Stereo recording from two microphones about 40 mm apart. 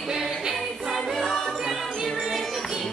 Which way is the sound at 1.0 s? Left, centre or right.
Centre.